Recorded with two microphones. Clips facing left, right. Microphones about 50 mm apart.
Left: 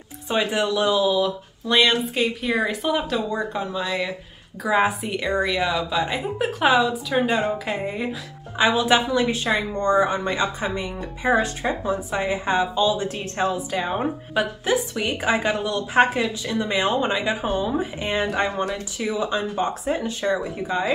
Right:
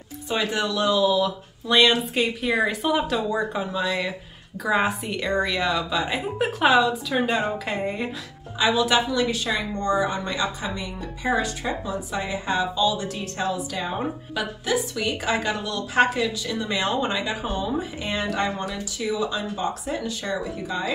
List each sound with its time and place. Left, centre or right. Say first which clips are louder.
0.3 s speech: left 3 dB; centre
8.5 s speech: left 2 dB; left